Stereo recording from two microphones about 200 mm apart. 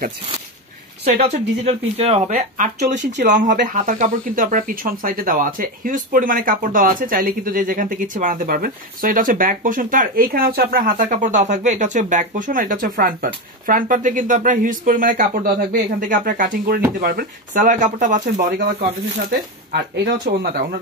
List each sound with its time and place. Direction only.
1.1 s speech: 35° right (ahead or behind)
20.2 s speech: 45° right (ahead or behind)